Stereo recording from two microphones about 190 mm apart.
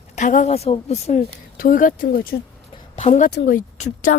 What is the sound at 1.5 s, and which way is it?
Speech, 50° left (ahead or behind).